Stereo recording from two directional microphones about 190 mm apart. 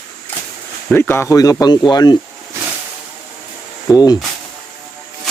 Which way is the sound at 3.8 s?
20° left (ahead or behind).